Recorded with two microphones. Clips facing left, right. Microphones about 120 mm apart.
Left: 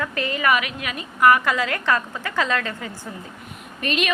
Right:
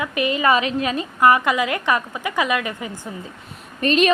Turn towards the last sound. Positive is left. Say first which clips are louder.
# right 7 dB
turn(degrees=-35)  # may be behind; listen again after turning